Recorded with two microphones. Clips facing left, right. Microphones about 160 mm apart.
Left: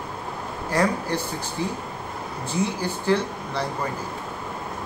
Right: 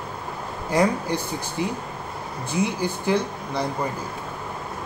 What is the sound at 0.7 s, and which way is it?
Speech, 15° right (ahead or behind).